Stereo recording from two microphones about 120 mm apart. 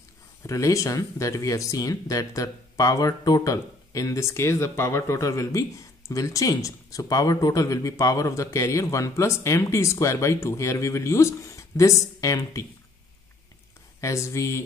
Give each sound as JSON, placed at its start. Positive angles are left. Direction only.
{"t": 0.5, "sound": "speech", "side_deg": 30}
{"t": 14.0, "sound": "speech", "side_deg": 25}